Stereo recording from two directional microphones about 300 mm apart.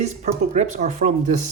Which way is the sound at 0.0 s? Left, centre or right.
Right.